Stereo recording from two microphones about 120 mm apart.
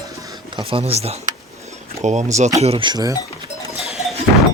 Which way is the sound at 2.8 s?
30° right (ahead or behind).